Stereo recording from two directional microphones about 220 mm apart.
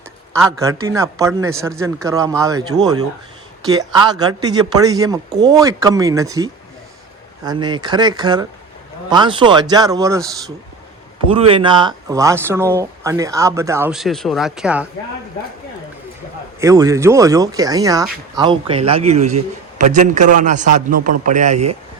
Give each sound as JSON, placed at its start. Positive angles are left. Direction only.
{"t": 0.3, "sound": "a man's voice", "side_deg": -15}
{"t": 11.3, "sound": "speech", "side_deg": -25}
{"t": 16.6, "sound": "a man's voice", "side_deg": -15}